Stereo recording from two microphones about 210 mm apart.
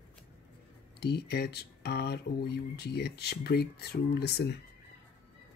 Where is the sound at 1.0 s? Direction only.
50° left (ahead or behind).